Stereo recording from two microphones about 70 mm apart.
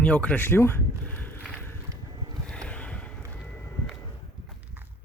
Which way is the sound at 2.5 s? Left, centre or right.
Centre.